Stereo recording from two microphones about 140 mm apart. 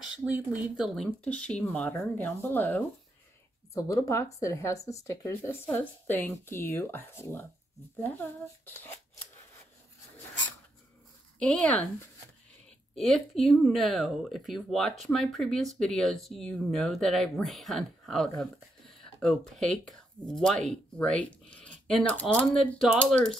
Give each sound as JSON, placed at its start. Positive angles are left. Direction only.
{"t": 0.0, "sound": "speech", "side_deg": -10}
{"t": 11.3, "sound": "speech", "side_deg": 10}
{"t": 12.9, "sound": "speech", "side_deg": 0}